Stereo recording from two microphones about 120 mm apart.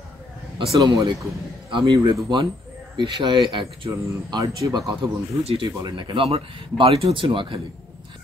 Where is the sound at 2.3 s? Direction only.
40° right (ahead or behind).